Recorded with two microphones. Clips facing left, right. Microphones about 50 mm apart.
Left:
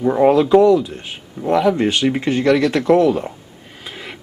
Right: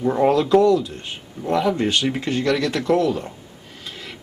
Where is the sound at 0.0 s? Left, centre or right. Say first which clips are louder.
Left 4 dB; centre.